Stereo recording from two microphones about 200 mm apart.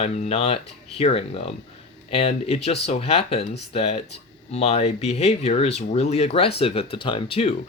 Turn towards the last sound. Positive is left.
turn(degrees=25)  # may be behind; listen again after turning